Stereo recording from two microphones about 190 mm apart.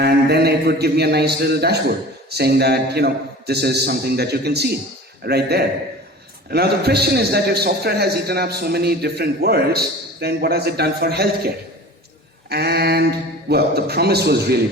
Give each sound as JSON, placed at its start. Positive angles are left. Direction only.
{"t": 0.0, "sound": "a man's voice", "side_deg": -55}